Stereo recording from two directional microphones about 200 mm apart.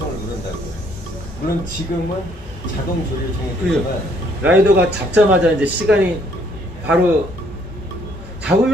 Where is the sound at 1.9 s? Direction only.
50° left (ahead or behind).